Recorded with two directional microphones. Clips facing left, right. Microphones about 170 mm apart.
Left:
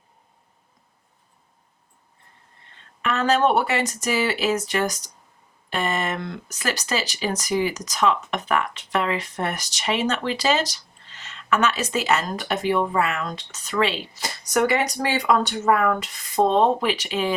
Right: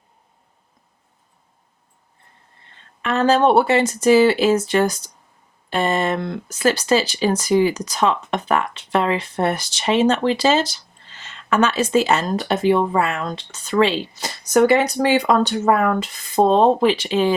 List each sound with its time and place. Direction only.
3.1 s speech: 30° right (ahead or behind)